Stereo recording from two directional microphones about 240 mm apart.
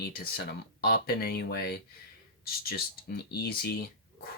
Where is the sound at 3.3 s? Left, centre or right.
Left.